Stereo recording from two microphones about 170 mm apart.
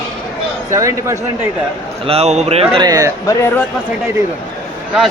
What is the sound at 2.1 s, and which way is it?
Speech, 40° right (ahead or behind).